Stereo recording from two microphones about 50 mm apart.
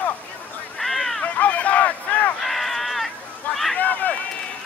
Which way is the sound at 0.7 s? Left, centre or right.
Centre.